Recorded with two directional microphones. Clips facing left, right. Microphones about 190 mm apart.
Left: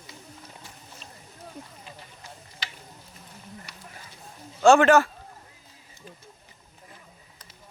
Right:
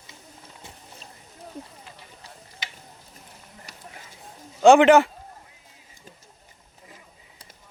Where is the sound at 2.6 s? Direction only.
20° right (ahead or behind).